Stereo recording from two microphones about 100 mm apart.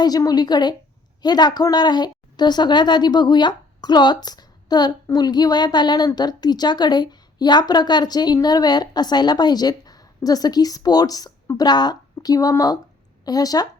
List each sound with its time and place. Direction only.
0.0 s a woman's voice: 40° left (ahead or behind)